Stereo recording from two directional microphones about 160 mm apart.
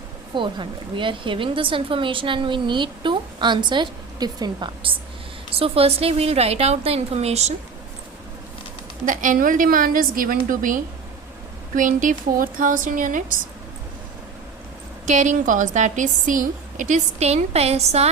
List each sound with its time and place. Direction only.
0.3 s speech: 30° right (ahead or behind)
9.0 s a woman's voice: 55° right (ahead or behind)
15.0 s a woman's voice: 50° right (ahead or behind)